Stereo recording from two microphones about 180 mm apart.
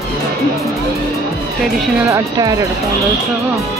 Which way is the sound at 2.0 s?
15° right (ahead or behind).